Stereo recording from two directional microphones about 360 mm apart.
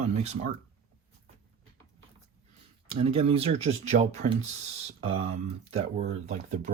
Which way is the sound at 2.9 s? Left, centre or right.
Centre.